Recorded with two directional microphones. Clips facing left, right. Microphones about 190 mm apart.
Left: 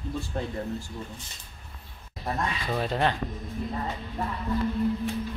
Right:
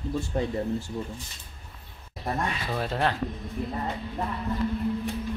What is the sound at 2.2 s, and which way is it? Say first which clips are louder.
Speech: right 1 dB; centre (ahead or behind).